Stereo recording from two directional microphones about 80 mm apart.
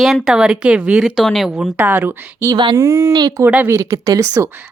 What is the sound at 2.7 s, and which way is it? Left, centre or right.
Speech, right.